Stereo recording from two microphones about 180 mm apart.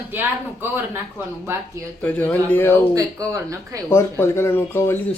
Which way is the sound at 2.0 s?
10° left (ahead or behind).